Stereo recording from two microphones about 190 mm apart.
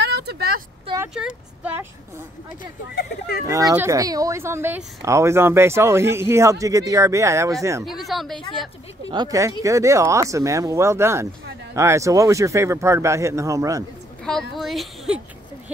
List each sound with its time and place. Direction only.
0.0 s vehicle: 60° right (ahead or behind)
1.1 s speech: 5° right (ahead or behind)
3.0 s speech: 55° left (ahead or behind)
3.4 s speech: 15° right (ahead or behind)
8.0 s speech: centre (ahead or behind)
9.1 s speech: 20° right (ahead or behind)
14.2 s speech: centre (ahead or behind)